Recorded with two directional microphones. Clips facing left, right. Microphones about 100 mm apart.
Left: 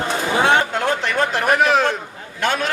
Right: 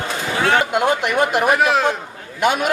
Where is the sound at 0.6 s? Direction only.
15° right (ahead or behind).